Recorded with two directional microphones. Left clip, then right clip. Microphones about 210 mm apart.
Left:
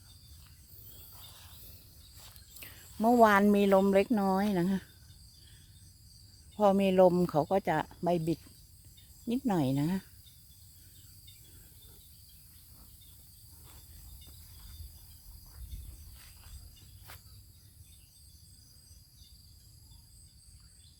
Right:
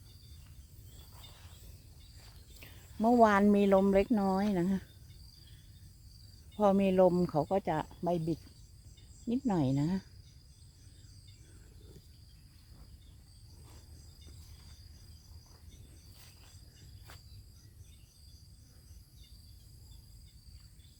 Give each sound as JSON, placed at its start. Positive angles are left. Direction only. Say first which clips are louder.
{"t": 2.2, "sound": "speech", "louder": "left 4 dB", "side_deg": 10}
{"t": 6.6, "sound": "speech", "louder": "left 2 dB", "side_deg": 5}
{"t": 17.1, "sound": "cricket", "louder": "left 3 dB", "side_deg": 15}